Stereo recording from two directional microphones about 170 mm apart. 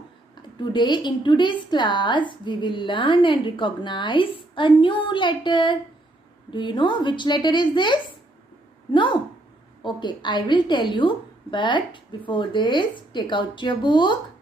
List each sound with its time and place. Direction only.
0.6 s a woman's voice: 25° left (ahead or behind)